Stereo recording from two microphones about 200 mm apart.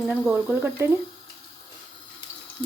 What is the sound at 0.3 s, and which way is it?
Speech, 10° right (ahead or behind).